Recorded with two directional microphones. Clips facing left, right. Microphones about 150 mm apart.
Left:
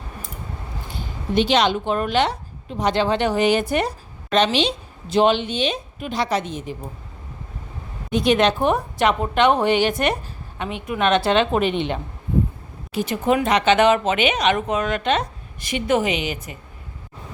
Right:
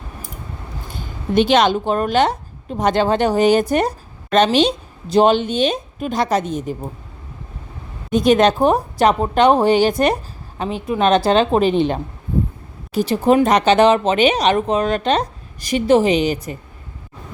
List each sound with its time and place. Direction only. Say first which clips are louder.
1.4 s a woman's voice: right 4 dB; 50° right (ahead or behind)
8.1 s speech: right 4 dB; 45° right (ahead or behind)